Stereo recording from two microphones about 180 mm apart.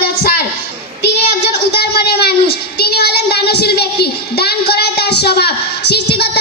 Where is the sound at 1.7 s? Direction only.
65° left (ahead or behind).